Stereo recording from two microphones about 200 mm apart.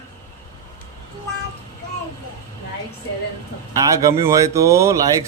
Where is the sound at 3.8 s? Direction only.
15° right (ahead or behind).